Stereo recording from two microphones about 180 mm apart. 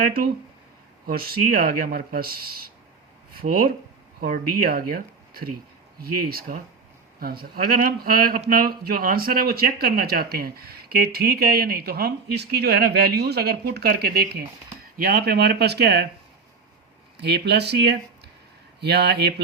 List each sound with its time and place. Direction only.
0.0 s speech: 55° right (ahead or behind)
17.2 s speech: 65° right (ahead or behind)